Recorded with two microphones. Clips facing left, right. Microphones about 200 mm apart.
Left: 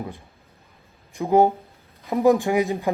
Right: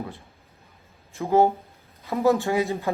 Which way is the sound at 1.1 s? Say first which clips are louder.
Left 2 dB; 15° left (ahead or behind).